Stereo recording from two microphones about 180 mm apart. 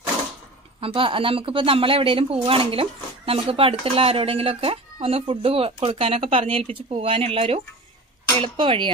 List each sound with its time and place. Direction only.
0.7 s speech: 30° right (ahead or behind)